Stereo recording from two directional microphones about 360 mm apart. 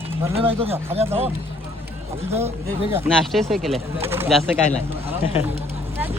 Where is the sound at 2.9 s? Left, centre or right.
Centre.